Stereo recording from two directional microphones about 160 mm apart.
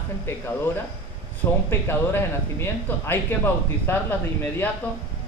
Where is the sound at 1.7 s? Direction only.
15° left (ahead or behind).